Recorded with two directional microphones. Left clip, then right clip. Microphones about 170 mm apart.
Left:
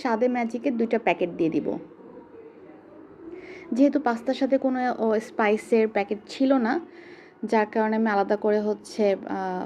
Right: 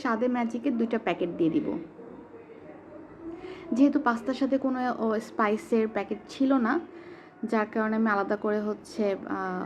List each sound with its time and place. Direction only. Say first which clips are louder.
0.0 s a woman's voice: left 4 dB; 20° left (ahead or behind)
3.4 s a woman's voice: left 2 dB; 20° left (ahead or behind)